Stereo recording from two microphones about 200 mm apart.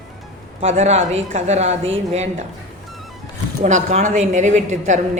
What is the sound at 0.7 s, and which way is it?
A woman's voice, 35° right (ahead or behind).